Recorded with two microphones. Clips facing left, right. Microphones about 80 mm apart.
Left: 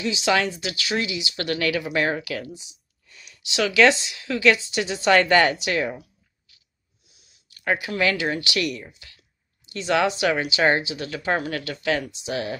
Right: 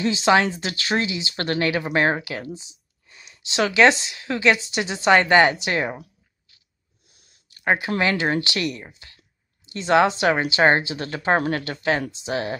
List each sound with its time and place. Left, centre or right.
0.0 s speech: right
7.1 s a sound: right
7.5 s speech: right